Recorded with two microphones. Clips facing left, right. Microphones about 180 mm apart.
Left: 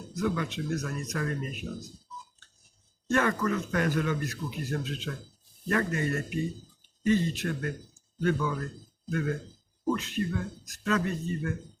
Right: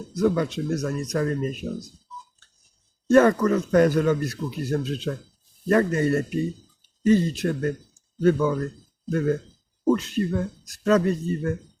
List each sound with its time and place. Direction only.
0.2 s speech: 35° right (ahead or behind)
3.1 s speech: 40° right (ahead or behind)